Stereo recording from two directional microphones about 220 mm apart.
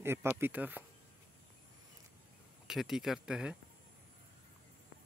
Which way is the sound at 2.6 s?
Centre (ahead or behind).